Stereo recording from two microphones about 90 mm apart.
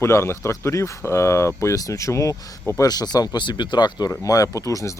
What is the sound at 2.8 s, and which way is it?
Speech, 45° left (ahead or behind).